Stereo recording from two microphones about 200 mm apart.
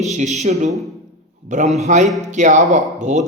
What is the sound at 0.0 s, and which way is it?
Speech, 35° right (ahead or behind).